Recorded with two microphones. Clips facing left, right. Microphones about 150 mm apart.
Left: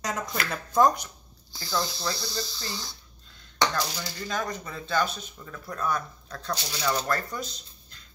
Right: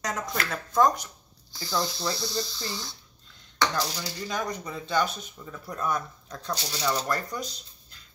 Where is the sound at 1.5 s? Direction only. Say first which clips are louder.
Right 1 dB; 15° right (ahead or behind).